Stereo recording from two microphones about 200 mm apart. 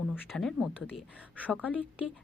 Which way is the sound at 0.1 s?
Centre (ahead or behind).